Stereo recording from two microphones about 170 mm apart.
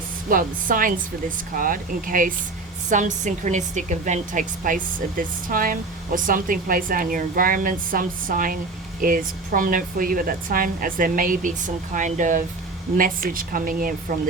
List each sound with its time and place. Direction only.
0.3 s a woman's voice: 55° right (ahead or behind)